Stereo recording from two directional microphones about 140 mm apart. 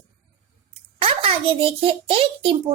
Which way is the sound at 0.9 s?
40° right (ahead or behind).